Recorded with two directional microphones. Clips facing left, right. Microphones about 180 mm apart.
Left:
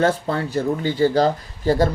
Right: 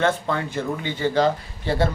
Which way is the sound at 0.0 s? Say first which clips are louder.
Left 2 dB; 35° left (ahead or behind).